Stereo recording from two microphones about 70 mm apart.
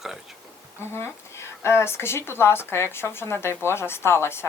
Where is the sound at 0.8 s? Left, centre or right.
Left.